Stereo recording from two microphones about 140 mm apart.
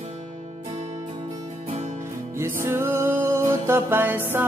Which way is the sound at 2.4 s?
20° right (ahead or behind).